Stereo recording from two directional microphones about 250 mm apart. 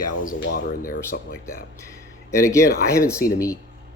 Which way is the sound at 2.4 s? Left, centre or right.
Centre.